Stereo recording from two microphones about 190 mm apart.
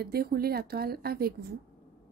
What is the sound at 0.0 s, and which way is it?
Speech, 55° right (ahead or behind).